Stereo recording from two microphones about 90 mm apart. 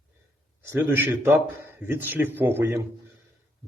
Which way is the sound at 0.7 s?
25° right (ahead or behind).